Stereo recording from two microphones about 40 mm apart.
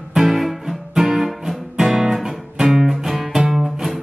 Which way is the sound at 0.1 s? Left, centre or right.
Centre.